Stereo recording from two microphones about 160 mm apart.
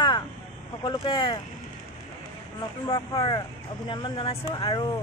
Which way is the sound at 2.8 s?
25° left (ahead or behind).